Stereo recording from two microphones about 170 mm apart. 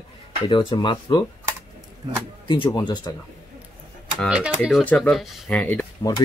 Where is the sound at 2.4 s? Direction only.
30° left (ahead or behind).